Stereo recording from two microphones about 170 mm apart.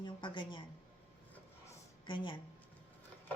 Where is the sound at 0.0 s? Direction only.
30° left (ahead or behind).